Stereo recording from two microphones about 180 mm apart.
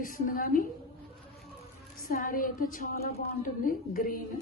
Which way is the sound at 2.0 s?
50° left (ahead or behind).